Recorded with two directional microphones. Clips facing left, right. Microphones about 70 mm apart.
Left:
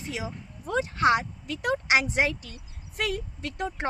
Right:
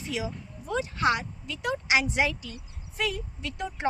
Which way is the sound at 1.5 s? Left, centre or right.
Left.